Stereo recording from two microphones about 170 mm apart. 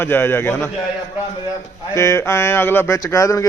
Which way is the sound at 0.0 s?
10° left (ahead or behind).